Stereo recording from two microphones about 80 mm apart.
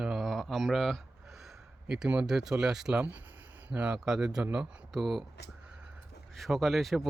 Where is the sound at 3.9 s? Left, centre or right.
Centre.